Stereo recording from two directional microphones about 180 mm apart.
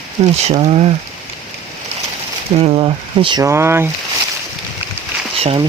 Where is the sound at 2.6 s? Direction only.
30° right (ahead or behind).